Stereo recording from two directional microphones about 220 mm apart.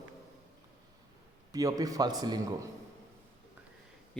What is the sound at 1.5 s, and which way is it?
A man's voice, 15° right (ahead or behind).